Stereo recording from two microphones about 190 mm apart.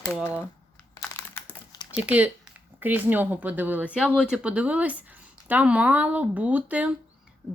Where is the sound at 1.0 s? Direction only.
15° left (ahead or behind).